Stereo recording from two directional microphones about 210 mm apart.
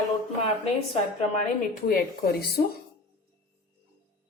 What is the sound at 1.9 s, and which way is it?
Speech, 45° left (ahead or behind).